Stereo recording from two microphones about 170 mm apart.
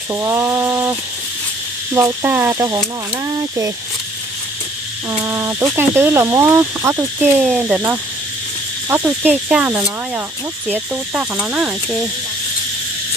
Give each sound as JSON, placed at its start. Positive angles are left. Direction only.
{"t": 0.1, "sound": "speech", "side_deg": -15}
{"t": 2.0, "sound": "speech", "side_deg": -15}
{"t": 5.1, "sound": "speech", "side_deg": -15}